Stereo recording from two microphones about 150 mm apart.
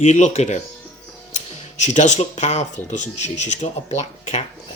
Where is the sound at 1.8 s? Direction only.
50° left (ahead or behind).